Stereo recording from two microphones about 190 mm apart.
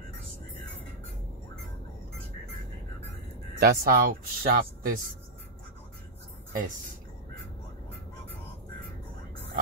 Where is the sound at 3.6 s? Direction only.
50° right (ahead or behind).